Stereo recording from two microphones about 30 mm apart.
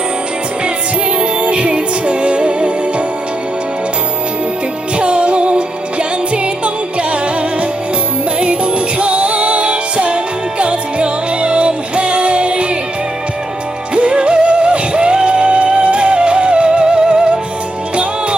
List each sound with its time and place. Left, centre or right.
1.2 s music: right
4.9 s music: right
8.4 s music: right
13.9 s music: right
17.9 s music: right